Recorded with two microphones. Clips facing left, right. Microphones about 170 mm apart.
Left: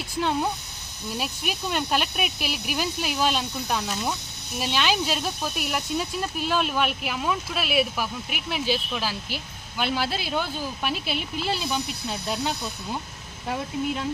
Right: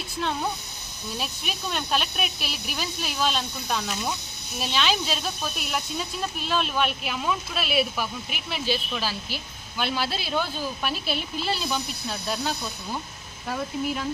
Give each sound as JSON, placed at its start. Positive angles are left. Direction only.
{"t": 1.1, "sound": "speech", "side_deg": 10}